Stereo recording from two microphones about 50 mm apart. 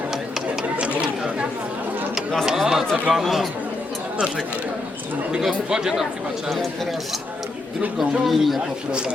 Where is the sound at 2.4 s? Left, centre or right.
Centre.